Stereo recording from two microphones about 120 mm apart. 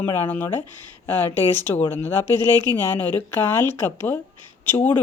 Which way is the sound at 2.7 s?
15° left (ahead or behind).